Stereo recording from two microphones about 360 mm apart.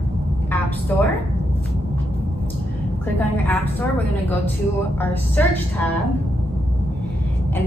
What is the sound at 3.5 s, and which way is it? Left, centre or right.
A woman's voice, centre.